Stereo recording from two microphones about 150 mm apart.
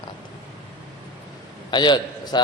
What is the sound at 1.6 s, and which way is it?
Speech, 30° left (ahead or behind).